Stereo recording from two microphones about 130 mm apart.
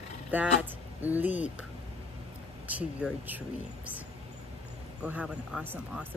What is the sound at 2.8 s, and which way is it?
Speech, 10° right (ahead or behind).